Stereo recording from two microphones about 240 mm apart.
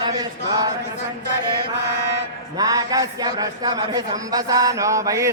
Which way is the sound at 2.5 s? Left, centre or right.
Centre.